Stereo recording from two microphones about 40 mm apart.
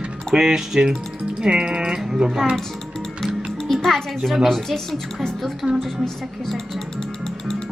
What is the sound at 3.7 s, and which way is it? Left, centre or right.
Music, centre.